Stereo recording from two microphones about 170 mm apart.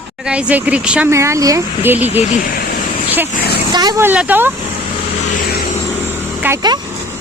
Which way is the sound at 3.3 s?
65° left (ahead or behind).